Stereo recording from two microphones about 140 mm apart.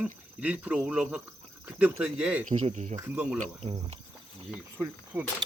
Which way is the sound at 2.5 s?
50° right (ahead or behind).